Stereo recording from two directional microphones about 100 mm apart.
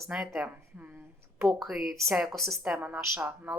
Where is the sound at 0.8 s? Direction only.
20° right (ahead or behind).